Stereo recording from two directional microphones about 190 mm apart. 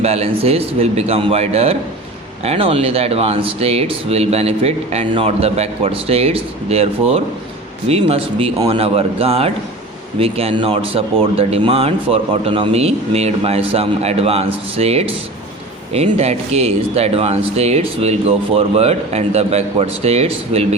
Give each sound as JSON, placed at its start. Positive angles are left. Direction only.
{"t": 0.0, "sound": "speech", "side_deg": -35}